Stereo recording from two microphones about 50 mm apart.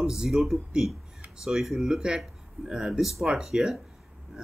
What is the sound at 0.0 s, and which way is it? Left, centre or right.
Speech, centre.